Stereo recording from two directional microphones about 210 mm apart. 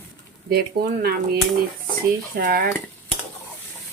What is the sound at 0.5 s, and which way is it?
Speech, 50° right (ahead or behind).